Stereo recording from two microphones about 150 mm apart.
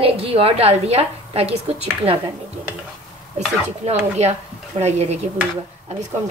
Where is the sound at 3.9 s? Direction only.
45° right (ahead or behind).